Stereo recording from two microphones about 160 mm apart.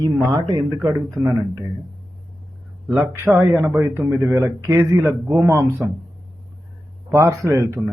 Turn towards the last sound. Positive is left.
turn(degrees=-20)  # may be behind; listen again after turning